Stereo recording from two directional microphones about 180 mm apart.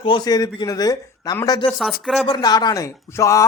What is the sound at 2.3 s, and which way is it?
Speech, 20° left (ahead or behind).